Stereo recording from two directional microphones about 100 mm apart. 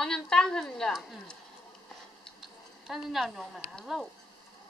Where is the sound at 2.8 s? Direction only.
5° right (ahead or behind).